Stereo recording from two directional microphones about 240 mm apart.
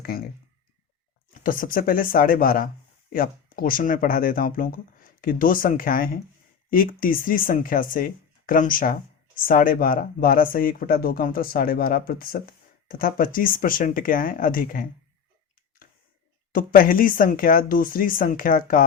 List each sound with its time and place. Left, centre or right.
0.0 s speech: left
1.3 s speech: left
16.5 s speech: left